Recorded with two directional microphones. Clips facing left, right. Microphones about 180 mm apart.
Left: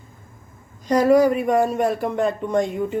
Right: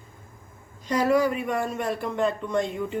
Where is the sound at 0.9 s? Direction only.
40° left (ahead or behind).